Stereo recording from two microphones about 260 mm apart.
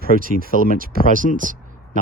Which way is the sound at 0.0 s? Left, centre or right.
Right.